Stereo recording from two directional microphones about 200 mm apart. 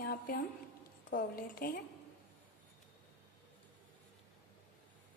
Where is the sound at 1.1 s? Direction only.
45° left (ahead or behind).